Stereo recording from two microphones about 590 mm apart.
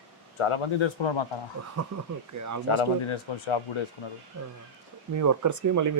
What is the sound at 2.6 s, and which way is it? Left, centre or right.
Speech, left.